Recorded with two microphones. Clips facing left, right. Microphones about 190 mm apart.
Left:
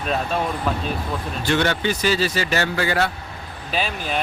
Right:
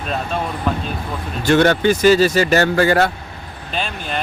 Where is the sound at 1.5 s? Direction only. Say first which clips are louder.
Right 7 dB; 45° right (ahead or behind).